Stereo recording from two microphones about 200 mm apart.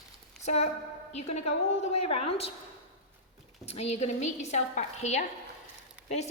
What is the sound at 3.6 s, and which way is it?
A woman's voice, 30° left (ahead or behind).